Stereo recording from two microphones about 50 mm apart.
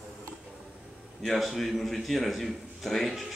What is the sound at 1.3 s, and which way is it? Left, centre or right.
Speech, centre.